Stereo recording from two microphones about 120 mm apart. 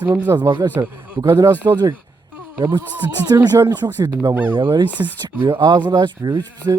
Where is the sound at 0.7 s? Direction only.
15° right (ahead or behind).